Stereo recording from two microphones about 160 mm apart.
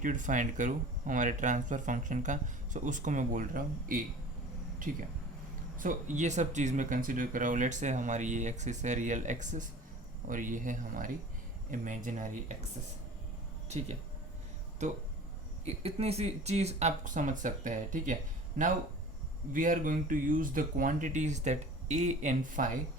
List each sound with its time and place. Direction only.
0.0 s speech: 55° right (ahead or behind)
5.8 s speech: 55° right (ahead or behind)
13.7 s speech: 45° right (ahead or behind)
15.6 s speech: 40° right (ahead or behind)